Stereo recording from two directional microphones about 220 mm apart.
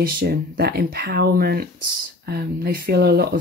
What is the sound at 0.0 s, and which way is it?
Speech, 45° right (ahead or behind).